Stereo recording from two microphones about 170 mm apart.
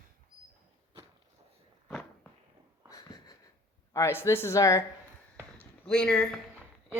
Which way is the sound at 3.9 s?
15° left (ahead or behind).